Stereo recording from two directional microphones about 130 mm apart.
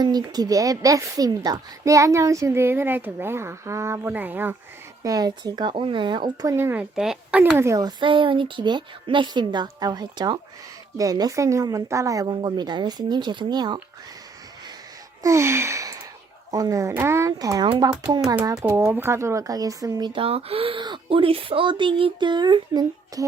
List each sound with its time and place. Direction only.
0.0 s a woman's voice: 30° right (ahead or behind); by 4.5 s 15° right (ahead or behind)
5.0 s speech: 30° right (ahead or behind)
6.9 s a woman's voice: 5° right (ahead or behind)
7.7 s a woman's voice: 30° right (ahead or behind)
15.2 s a sound: 20° right (ahead or behind)
16.5 s a woman's voice: 25° right (ahead or behind)
18.8 s speech: 15° right (ahead or behind); by 23.2 s 35° right (ahead or behind)